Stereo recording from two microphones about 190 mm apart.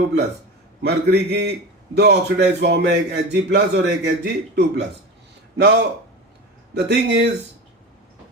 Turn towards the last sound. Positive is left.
turn(degrees=-60)  # may be behind; listen again after turning